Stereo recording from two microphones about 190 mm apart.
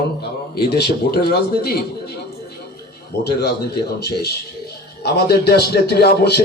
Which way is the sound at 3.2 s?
60° left (ahead or behind).